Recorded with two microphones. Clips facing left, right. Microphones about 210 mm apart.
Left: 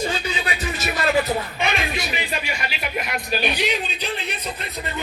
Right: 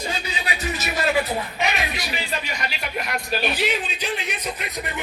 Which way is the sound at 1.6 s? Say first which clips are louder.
Left 2 dB; 30° left (ahead or behind).